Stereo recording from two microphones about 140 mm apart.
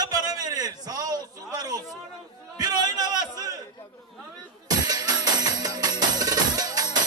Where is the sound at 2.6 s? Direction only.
30° right (ahead or behind).